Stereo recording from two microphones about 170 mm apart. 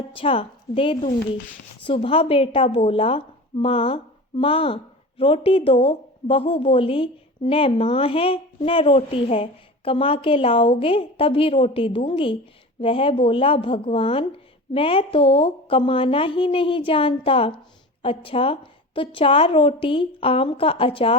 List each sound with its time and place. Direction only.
0.1 s speech: 30° left (ahead or behind)